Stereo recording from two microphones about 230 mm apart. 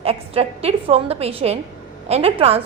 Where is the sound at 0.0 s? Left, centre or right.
Right.